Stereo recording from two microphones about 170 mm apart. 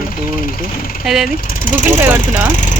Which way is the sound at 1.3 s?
55° left (ahead or behind).